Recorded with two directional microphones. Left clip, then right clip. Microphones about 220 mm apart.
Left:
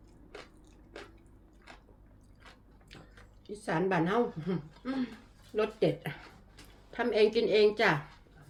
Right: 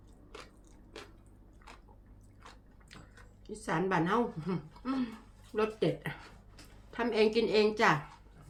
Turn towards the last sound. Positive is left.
turn(degrees=-10)  # may be behind; listen again after turning